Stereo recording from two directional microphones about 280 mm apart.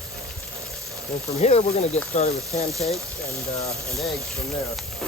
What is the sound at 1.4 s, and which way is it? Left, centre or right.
Speech, left.